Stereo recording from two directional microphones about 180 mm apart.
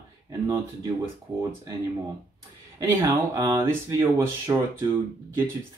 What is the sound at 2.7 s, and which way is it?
Speech, 20° right (ahead or behind).